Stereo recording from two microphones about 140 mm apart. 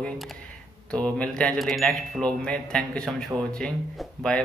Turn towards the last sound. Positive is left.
turn(degrees=5)  # may be behind; listen again after turning